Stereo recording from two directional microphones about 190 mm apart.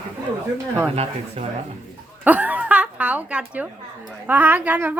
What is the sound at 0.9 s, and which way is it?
Speech, 35° right (ahead or behind).